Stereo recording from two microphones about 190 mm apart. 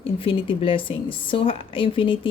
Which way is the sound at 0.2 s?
30° left (ahead or behind).